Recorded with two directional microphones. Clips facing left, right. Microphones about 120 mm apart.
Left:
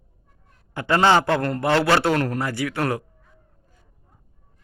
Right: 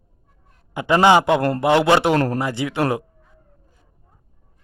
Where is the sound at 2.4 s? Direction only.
20° right (ahead or behind).